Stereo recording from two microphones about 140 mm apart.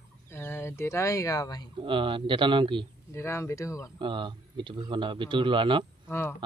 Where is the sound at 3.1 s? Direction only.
20° left (ahead or behind).